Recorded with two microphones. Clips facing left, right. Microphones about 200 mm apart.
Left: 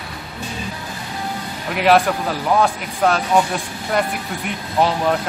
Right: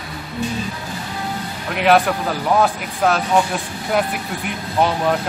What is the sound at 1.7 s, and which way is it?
A man's voice, centre (ahead or behind).